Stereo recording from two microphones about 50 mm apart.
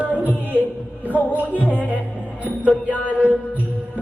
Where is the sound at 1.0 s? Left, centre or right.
Right.